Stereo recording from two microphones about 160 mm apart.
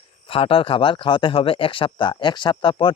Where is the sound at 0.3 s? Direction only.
35° left (ahead or behind).